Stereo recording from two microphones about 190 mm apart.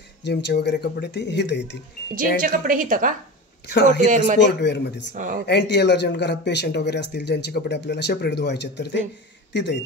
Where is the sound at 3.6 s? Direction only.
60° left (ahead or behind).